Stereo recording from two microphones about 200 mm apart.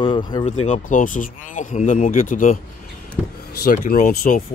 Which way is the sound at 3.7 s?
45° left (ahead or behind).